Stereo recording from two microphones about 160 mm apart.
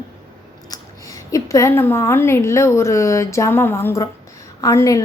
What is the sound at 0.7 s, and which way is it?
A woman's voice, 20° left (ahead or behind).